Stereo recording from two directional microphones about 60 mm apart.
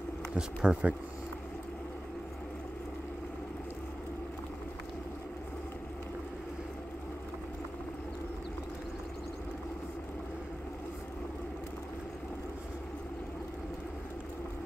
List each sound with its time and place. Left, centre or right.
0.4 s speech: centre